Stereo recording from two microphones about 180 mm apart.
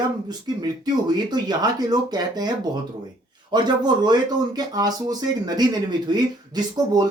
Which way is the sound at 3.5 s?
25° right (ahead or behind).